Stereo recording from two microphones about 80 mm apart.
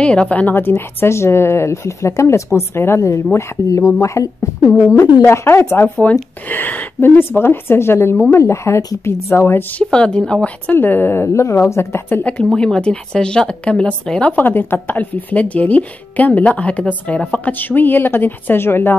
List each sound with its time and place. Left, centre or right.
0.0 s a woman's voice: centre; by 9.7 s left
9.8 s speech: centre
10.7 s speech: left
11.2 s a woman's voice: left
12.2 s speech: left
14.3 s speech: left